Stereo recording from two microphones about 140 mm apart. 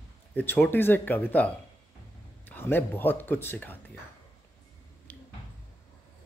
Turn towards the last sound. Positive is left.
turn(degrees=10)  # may be behind; listen again after turning